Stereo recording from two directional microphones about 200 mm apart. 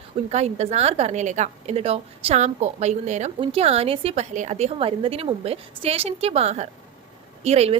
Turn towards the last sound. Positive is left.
turn(degrees=-30)  # may be behind; listen again after turning